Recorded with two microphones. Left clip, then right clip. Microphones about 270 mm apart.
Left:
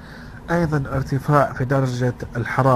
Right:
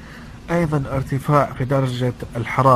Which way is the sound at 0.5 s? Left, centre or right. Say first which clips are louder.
Right 1 dB; centre.